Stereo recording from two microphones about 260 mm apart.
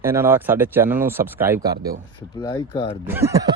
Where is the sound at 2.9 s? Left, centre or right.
Centre.